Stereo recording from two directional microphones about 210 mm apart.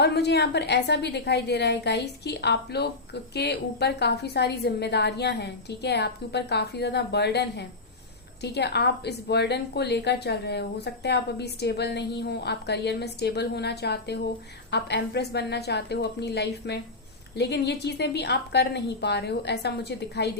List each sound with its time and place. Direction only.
0.0 s a woman's voice: 50° left (ahead or behind)